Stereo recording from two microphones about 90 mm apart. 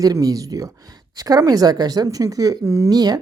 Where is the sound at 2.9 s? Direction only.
45° right (ahead or behind).